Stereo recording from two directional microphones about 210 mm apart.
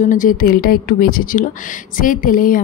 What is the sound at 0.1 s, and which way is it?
A woman's voice, 40° left (ahead or behind).